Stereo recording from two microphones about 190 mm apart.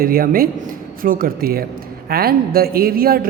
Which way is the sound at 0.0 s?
50° right (ahead or behind).